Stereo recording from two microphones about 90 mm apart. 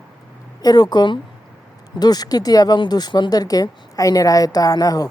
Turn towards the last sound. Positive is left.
turn(degrees=45)  # may be behind; listen again after turning